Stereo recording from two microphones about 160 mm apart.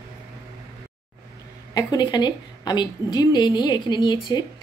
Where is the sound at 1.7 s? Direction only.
25° left (ahead or behind).